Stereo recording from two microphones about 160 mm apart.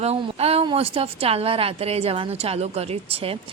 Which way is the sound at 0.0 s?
40° right (ahead or behind).